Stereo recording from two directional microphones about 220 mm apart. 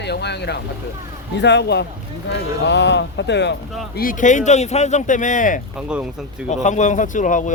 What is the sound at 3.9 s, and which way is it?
Speech, 40° left (ahead or behind).